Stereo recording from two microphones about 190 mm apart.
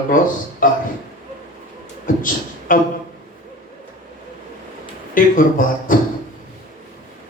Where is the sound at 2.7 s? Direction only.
45° left (ahead or behind).